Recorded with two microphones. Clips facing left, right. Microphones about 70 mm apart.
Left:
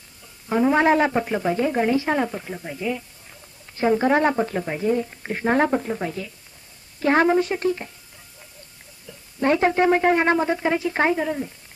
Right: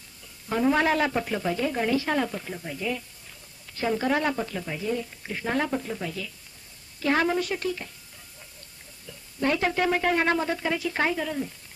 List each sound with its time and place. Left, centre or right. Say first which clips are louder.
0.4 s a woman's voice: left 5 dB; centre
3.8 s a woman's voice: left 7 dB; left
9.4 s a woman's voice: left 6 dB; left